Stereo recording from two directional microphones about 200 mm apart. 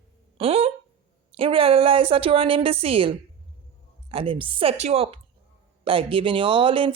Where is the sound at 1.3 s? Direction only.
30° right (ahead or behind).